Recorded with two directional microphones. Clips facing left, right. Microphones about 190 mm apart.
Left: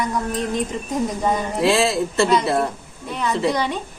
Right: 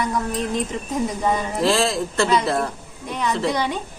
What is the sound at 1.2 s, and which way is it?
A woman's voice, 5° left (ahead or behind).